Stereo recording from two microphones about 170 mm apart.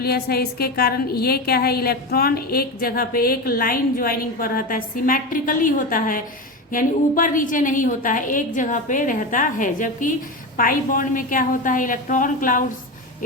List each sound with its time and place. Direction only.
0.0 s a woman's voice: 65° left (ahead or behind)